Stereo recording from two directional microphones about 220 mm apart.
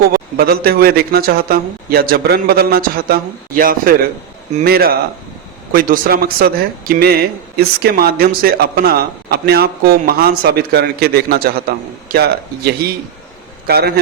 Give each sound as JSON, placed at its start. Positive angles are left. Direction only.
{"t": 0.1, "sound": "a man's voice", "side_deg": -45}
{"t": 13.7, "sound": "a man's voice", "side_deg": -45}